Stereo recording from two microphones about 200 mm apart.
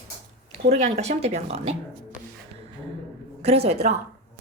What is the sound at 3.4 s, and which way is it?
Speech, 30° right (ahead or behind).